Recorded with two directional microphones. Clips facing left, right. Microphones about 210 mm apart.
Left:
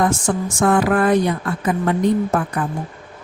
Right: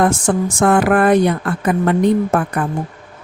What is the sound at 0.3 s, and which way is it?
Speech, 65° right (ahead or behind).